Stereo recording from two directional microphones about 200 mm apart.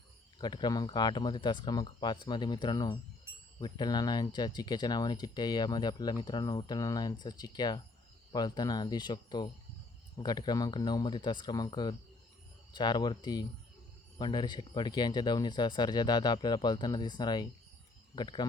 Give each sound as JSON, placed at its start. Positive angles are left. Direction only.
{"t": 0.3, "sound": "speech", "side_deg": 20}